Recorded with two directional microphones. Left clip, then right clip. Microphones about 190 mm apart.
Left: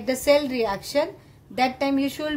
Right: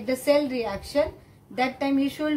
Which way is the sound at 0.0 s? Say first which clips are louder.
Left 2 dB; 40° left (ahead or behind).